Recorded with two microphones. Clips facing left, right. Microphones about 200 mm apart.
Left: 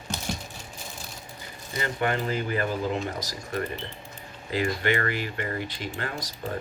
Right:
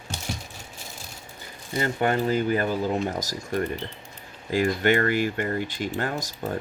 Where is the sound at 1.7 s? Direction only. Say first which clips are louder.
Right 4 dB; 45° right (ahead or behind).